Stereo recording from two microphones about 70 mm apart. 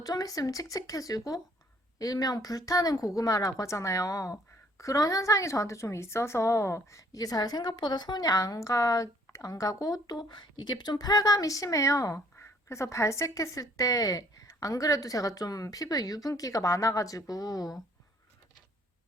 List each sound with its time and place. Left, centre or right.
0.0 s a woman's voice: left